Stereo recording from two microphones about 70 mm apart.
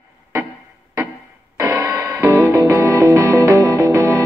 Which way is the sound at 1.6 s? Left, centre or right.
Right.